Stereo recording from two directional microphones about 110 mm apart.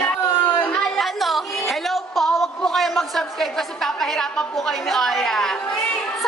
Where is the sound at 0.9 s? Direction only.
Centre (ahead or behind).